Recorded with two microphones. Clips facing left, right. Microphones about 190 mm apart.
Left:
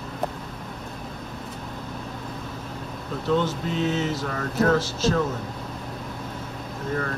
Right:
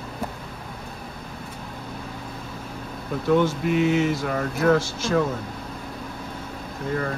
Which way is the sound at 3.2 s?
10° right (ahead or behind).